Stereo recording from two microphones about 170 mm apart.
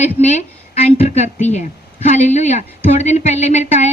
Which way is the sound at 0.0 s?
40° left (ahead or behind).